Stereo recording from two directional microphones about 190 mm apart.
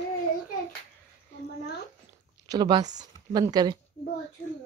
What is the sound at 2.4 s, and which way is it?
A woman's voice, 20° right (ahead or behind).